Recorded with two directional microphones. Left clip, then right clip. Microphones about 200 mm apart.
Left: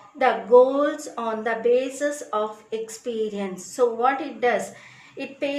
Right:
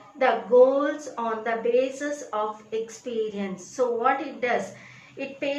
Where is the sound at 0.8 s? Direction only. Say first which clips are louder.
Left 2 dB; 45° left (ahead or behind).